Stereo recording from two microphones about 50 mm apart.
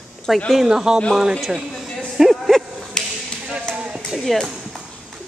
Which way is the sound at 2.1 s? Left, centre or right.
Centre.